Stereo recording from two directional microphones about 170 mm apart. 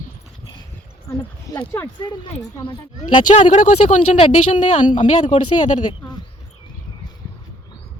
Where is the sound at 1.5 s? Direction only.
20° left (ahead or behind).